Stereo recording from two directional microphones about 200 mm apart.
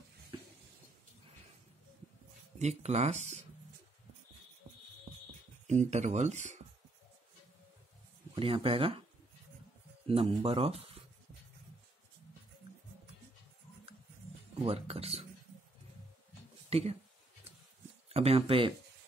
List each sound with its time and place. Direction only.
2.6 s speech: 35° right (ahead or behind)
5.7 s speech: 35° right (ahead or behind)
8.4 s speech: 25° right (ahead or behind)
10.0 s speech: 30° right (ahead or behind)
14.6 s speech: 30° right (ahead or behind)
16.6 s a sound: 30° right (ahead or behind)
18.0 s speech: 30° right (ahead or behind)